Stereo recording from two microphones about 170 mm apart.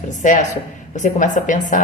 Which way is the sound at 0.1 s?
45° left (ahead or behind).